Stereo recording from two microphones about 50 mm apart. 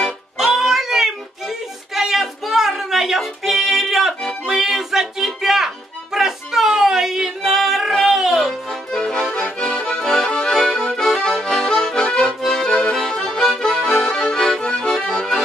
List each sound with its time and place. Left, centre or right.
0.4 s music: centre
9.3 s accordion: centre